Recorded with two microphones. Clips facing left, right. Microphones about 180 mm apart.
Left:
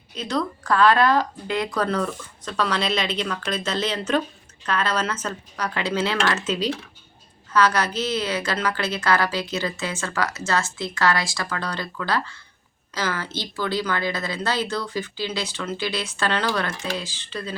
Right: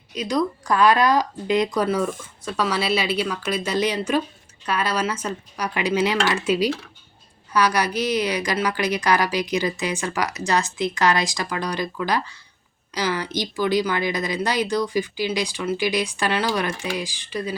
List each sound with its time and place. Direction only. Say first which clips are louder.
0.1 s a woman's voice: right 3 dB; 10° right (ahead or behind)